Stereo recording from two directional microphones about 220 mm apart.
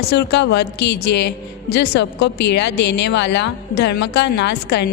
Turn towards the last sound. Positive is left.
turn(degrees=50)  # may be behind; listen again after turning